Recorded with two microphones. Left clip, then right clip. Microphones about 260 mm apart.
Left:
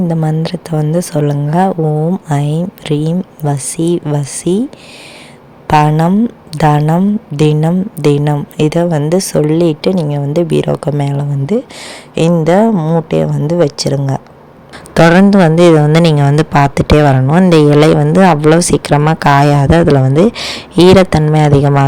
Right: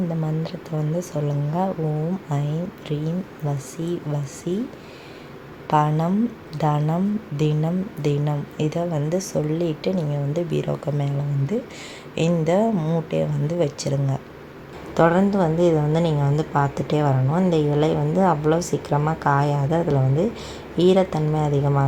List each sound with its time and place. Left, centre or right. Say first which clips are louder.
0.1 s a woman's voice: left 12 dB; left
5.6 s a woman's voice: left 11 dB; left